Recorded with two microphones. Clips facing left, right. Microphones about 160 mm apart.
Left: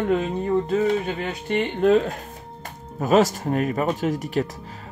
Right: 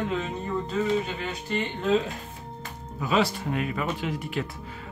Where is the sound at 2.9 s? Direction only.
45° left (ahead or behind).